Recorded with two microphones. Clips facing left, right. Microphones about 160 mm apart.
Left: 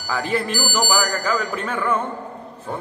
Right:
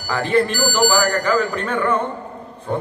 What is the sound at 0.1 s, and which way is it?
Speech, 5° left (ahead or behind).